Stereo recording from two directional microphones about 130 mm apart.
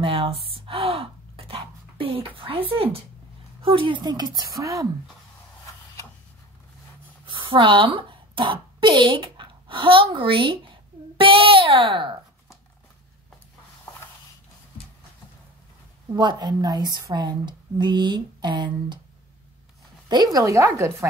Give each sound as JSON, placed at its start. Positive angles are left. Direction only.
{"t": 0.0, "sound": "gasp", "side_deg": -45}
{"t": 3.6, "sound": "a woman's voice", "side_deg": -40}
{"t": 7.2, "sound": "a sound", "side_deg": -40}
{"t": 16.1, "sound": "a woman's voice", "side_deg": -35}
{"t": 20.1, "sound": "speech", "side_deg": -30}